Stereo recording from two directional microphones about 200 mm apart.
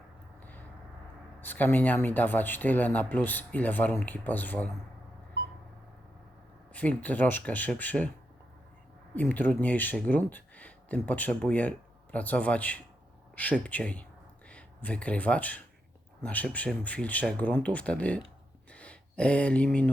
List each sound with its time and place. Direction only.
1.4 s speech: 10° left (ahead or behind)
6.7 s speech: 5° left (ahead or behind)
9.1 s speech: 10° left (ahead or behind)